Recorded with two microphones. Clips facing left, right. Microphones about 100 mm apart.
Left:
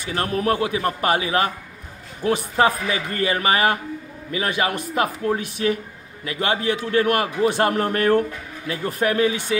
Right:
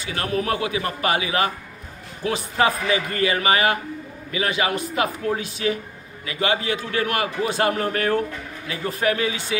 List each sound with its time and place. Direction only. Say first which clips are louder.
0.0 s a man's voice: left 2 dB; 40° left (ahead or behind)